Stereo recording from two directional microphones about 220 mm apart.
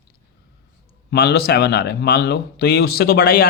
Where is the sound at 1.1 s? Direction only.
45° left (ahead or behind).